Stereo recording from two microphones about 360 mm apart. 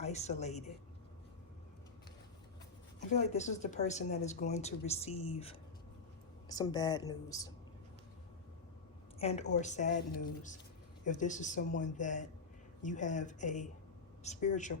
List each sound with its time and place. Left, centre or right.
0.0 s a man's voice: centre
3.1 s speech: centre
9.1 s speech: centre